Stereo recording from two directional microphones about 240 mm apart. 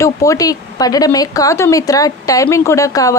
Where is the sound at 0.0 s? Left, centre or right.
Centre.